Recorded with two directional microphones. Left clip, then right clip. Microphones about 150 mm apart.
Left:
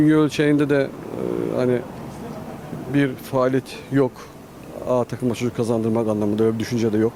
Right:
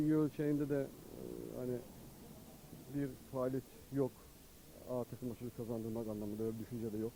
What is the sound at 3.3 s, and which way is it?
Speech, 15° left (ahead or behind).